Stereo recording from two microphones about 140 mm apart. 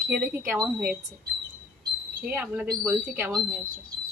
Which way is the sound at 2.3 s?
10° right (ahead or behind).